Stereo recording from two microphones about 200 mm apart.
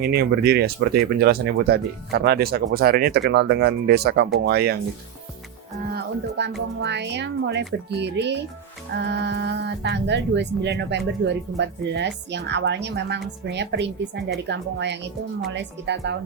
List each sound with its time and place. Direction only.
0.0 s speech: 55° right (ahead or behind)
5.9 s speech: 60° right (ahead or behind)